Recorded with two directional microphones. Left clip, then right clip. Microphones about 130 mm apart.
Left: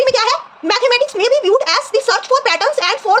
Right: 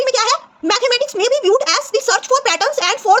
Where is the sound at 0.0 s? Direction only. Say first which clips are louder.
Left 2 dB; 40° right (ahead or behind).